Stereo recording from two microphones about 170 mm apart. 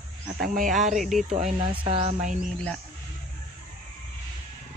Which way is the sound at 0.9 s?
Centre (ahead or behind).